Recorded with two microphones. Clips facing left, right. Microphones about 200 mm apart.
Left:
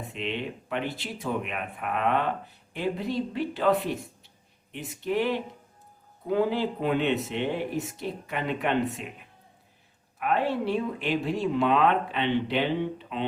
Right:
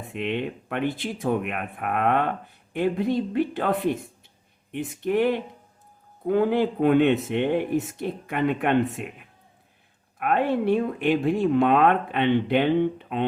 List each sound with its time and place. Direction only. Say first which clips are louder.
0.1 s speech: right 6 dB; 55° right (ahead or behind)
10.2 s speech: right 3 dB; 55° right (ahead or behind)